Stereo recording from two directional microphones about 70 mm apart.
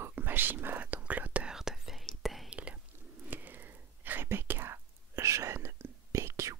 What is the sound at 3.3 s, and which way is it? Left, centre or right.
Whispering, right.